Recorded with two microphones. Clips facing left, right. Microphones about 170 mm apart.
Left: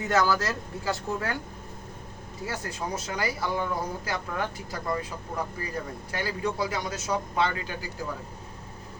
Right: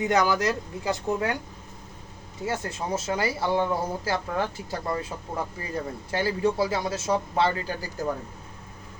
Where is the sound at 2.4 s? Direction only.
25° right (ahead or behind).